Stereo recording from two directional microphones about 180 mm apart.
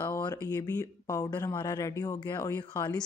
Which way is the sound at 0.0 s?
20° left (ahead or behind).